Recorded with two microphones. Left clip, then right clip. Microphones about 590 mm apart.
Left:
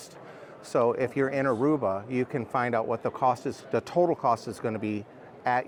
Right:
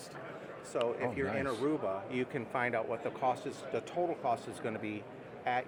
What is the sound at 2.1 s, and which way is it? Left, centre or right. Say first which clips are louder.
Speech: left 7 dB; left.